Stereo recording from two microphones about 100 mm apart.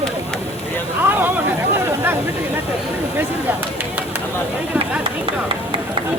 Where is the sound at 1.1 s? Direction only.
20° right (ahead or behind).